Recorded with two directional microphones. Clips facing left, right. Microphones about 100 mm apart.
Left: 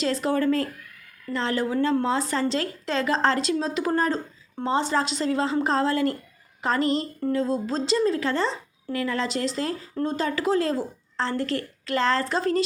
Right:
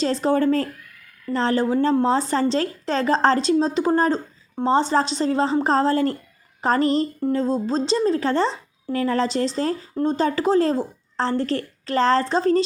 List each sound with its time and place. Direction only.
0.0 s a woman's voice: 30° right (ahead or behind)